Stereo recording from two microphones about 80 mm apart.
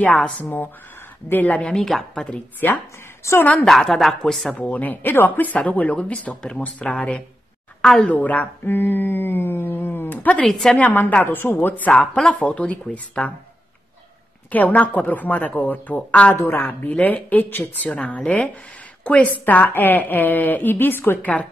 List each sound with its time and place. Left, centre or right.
0.1 s speech: centre
3.6 s speech: centre
4.6 s a woman's voice: centre
8.2 s music: centre
10.4 s speech: centre
10.8 s a woman's voice: left
14.5 s a woman's voice: left
16.3 s a woman's voice: left